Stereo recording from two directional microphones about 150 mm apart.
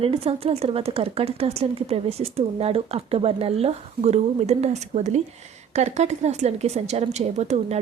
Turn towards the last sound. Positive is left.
turn(degrees=-45)  # may be behind; listen again after turning